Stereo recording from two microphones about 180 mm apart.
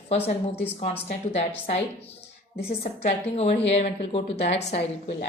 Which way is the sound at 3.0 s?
35° left (ahead or behind).